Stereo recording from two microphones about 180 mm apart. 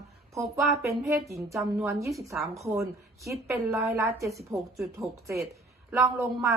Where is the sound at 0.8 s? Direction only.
15° right (ahead or behind).